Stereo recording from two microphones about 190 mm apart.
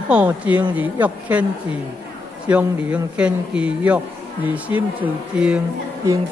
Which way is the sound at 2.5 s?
5° right (ahead or behind).